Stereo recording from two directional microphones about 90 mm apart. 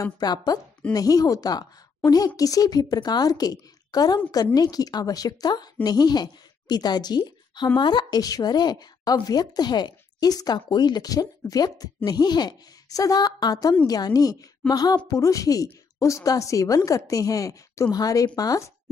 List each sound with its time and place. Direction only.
0.0 s a woman's voice: 50° left (ahead or behind)